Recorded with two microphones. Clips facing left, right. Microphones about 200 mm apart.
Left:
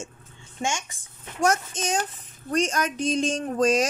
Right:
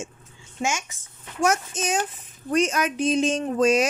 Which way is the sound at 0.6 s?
30° left (ahead or behind).